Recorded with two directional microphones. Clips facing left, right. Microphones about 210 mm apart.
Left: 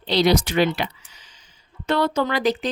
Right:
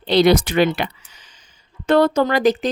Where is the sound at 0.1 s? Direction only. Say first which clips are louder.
Right 4 dB; 55° right (ahead or behind).